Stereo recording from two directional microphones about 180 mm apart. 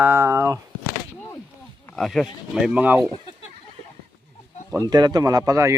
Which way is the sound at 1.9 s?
Centre (ahead or behind).